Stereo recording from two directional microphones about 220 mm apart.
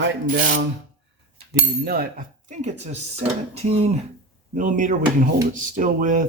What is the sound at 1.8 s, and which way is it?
Speech, 45° right (ahead or behind).